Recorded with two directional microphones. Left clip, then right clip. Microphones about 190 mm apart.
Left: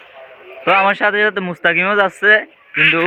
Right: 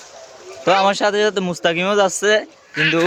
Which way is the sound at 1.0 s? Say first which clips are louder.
Left 2 dB; 15° right (ahead or behind).